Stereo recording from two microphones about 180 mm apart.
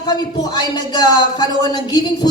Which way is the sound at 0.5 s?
25° left (ahead or behind).